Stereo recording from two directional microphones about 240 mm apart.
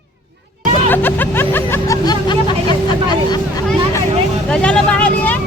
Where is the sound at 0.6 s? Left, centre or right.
Centre.